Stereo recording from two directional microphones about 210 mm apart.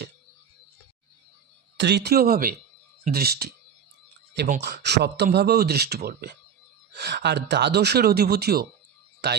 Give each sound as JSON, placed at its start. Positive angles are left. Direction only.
{"t": 1.8, "sound": "speech", "side_deg": -55}
{"t": 4.6, "sound": "speech", "side_deg": -50}